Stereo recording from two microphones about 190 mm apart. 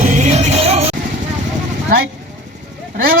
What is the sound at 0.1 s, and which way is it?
Music, 35° right (ahead or behind).